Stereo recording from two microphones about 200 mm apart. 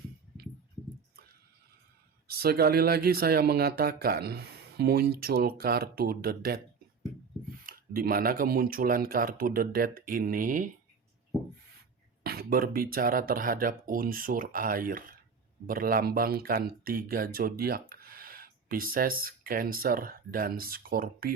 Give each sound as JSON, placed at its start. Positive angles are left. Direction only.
{"t": 2.2, "sound": "speech", "side_deg": -50}
{"t": 7.6, "sound": "speech", "side_deg": -45}
{"t": 12.2, "sound": "speech", "side_deg": -50}